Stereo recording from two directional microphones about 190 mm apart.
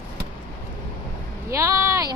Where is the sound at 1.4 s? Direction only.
15° right (ahead or behind).